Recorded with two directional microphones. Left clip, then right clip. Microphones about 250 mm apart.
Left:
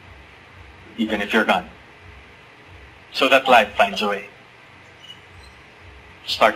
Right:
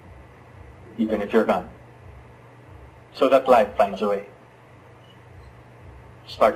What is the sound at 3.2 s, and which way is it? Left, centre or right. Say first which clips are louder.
A man's voice: left 2 dB; centre.